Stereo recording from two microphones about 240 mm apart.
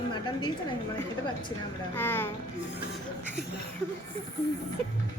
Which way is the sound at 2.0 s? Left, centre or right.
Centre.